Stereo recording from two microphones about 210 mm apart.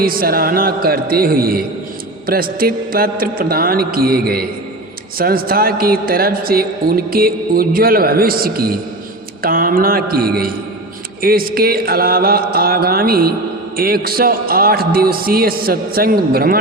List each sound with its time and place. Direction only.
0.0 s a woman's voice: 45° right (ahead or behind)